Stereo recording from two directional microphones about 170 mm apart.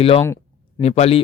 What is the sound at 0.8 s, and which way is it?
Speech, 40° left (ahead or behind).